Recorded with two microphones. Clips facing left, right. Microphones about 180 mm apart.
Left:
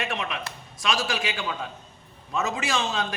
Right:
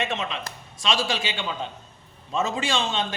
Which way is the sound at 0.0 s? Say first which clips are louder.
Right 2 dB; 25° right (ahead or behind).